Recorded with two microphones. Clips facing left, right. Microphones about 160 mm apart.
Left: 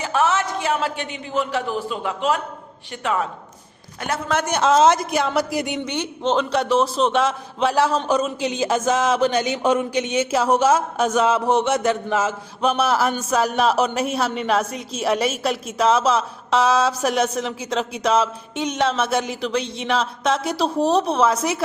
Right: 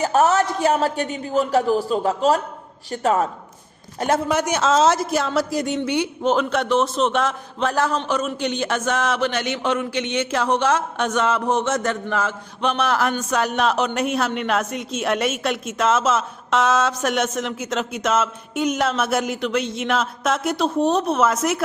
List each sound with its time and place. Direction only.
0.0 s a man's voice: 40° right (ahead or behind)
4.3 s speech: 10° right (ahead or behind)
4.6 s speech: 10° left (ahead or behind)
4.9 s a man's voice: centre (ahead or behind)
18.7 s a man's voice: 5° right (ahead or behind)